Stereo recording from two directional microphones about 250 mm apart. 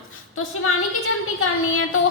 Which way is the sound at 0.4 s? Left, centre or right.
Left.